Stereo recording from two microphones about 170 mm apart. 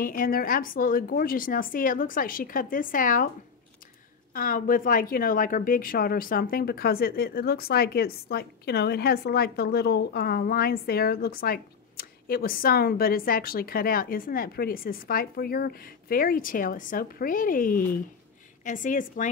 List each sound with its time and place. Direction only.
0.0 s speech: 55° left (ahead or behind)
4.3 s a woman's voice: 55° left (ahead or behind)